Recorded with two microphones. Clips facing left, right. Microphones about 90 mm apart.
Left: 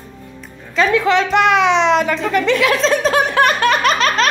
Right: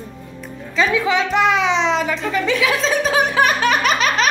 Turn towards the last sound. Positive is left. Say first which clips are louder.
# left 2 dB
turn(degrees=-5)  # may be behind; listen again after turning